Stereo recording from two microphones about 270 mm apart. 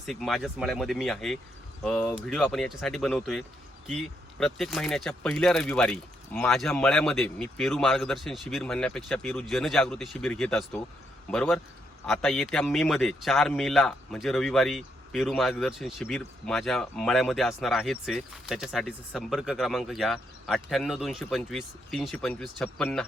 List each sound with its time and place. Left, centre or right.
0.0 s a man's voice: centre